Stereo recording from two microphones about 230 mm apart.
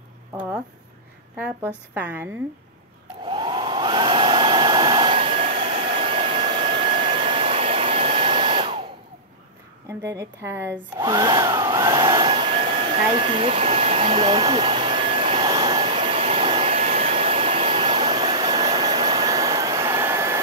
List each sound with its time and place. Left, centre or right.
1.3 s a woman's voice: centre
3.3 s hair dryer: right
9.8 s a woman's voice: centre
11.0 s vacuum cleaner: centre